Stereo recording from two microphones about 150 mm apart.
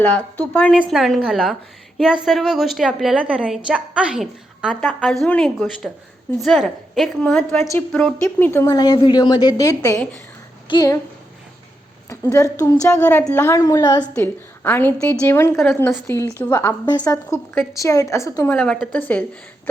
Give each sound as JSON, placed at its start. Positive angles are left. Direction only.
{"t": 0.0, "sound": "a woman's voice", "side_deg": 10}
{"t": 12.3, "sound": "a woman's voice", "side_deg": 20}
{"t": 15.5, "sound": "a woman's voice", "side_deg": 0}
{"t": 15.8, "sound": "a woman's voice", "side_deg": 15}
{"t": 18.5, "sound": "speech", "side_deg": 5}